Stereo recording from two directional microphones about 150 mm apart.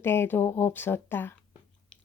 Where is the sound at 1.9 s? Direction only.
5° left (ahead or behind).